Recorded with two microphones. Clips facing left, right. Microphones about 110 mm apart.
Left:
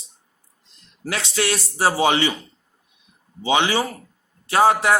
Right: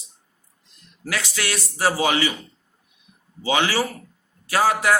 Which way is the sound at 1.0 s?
25° left (ahead or behind).